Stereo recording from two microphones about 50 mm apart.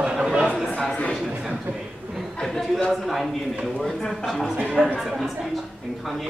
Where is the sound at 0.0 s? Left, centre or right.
Centre.